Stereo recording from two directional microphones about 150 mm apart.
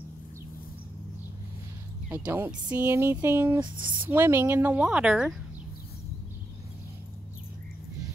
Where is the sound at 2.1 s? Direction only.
15° right (ahead or behind).